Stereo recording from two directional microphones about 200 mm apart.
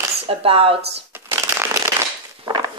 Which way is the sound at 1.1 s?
10° right (ahead or behind).